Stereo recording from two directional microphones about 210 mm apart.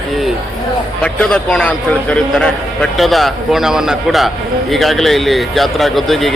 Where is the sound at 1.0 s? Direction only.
5° left (ahead or behind).